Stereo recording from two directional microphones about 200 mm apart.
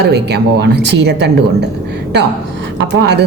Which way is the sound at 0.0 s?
55° right (ahead or behind).